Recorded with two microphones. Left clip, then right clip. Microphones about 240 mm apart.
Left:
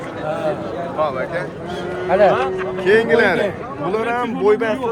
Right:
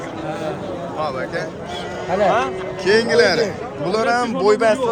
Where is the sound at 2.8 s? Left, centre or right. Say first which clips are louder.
Even; centre.